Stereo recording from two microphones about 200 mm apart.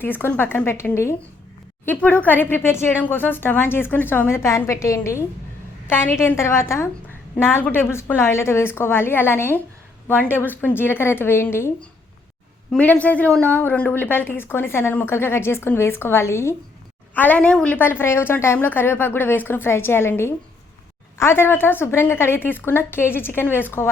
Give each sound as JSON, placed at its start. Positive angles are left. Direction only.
{"t": 0.0, "sound": "a woman's voice", "side_deg": 10}